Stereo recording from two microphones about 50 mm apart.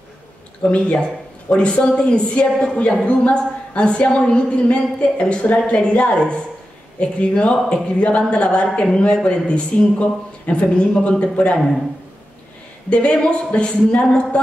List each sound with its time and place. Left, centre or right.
0.7 s a woman's voice: left
11.5 s speech: centre
12.9 s a woman's voice: centre